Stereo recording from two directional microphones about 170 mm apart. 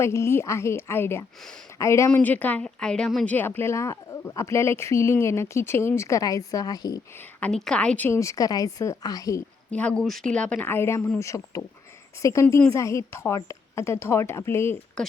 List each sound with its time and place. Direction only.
0.0 s speech: 15° left (ahead or behind)
7.3 s speech: 5° left (ahead or behind)
9.7 s speech: 5° left (ahead or behind)
15.0 s speech: 5° left (ahead or behind)